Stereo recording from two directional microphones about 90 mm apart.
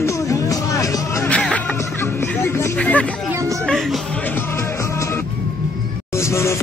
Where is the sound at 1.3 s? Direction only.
15° left (ahead or behind).